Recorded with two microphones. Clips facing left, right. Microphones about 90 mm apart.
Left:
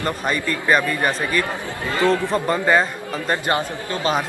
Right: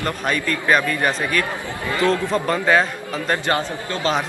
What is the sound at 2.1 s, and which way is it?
A man's voice, 5° left (ahead or behind).